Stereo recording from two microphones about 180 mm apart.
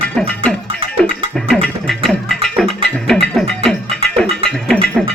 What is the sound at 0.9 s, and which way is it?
Music, 5° left (ahead or behind).